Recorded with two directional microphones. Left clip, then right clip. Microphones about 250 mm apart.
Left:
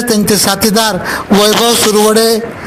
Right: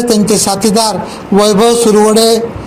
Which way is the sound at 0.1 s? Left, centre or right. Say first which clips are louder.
Left 2 dB; left.